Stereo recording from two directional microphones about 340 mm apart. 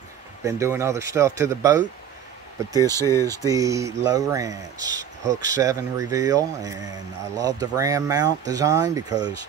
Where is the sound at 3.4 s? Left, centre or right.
Centre.